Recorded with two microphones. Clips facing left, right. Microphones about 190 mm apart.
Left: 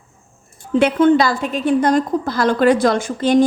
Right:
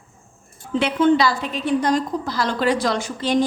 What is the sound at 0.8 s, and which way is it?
A woman's voice, 50° left (ahead or behind).